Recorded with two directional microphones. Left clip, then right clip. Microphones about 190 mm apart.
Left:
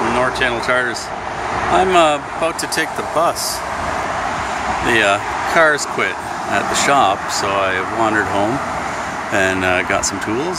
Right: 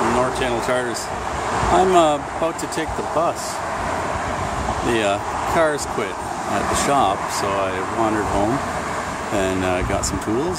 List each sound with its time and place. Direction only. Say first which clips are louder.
0.2 s speech: left 3 dB; 10° right (ahead or behind)
4.8 s speech: left 6 dB; 10° right (ahead or behind)